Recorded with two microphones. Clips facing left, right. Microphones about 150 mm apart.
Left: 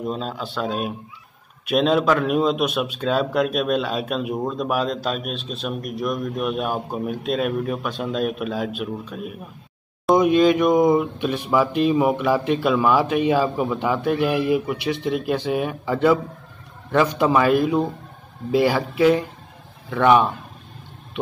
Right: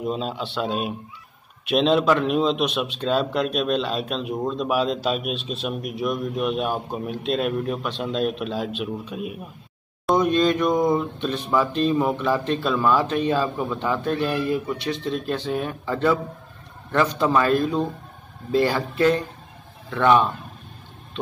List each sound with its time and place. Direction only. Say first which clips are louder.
0.0 s speech: even; centre (ahead or behind)
10.1 s speech: left 4 dB; 10° left (ahead or behind)